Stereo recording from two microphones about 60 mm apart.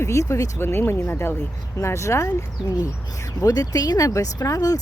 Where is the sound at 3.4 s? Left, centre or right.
Left.